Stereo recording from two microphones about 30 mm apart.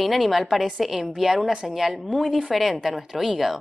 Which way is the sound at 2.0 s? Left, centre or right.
Centre.